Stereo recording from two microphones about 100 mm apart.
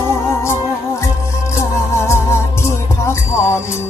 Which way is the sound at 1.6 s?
25° left (ahead or behind).